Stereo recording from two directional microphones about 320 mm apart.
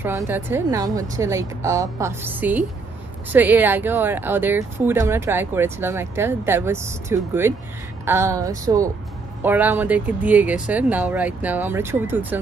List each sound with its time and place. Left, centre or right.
0.0 s speech: centre